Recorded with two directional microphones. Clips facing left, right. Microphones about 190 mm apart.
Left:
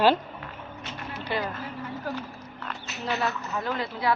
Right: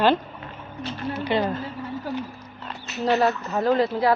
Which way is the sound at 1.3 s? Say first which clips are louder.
Right 6 dB; 20° right (ahead or behind).